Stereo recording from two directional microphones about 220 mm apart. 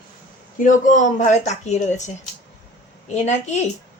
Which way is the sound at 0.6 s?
35° left (ahead or behind).